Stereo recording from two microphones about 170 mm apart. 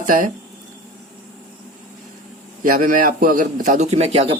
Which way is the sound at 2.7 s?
50° right (ahead or behind).